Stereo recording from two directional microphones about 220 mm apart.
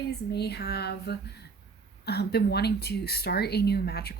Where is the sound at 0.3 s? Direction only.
50° left (ahead or behind).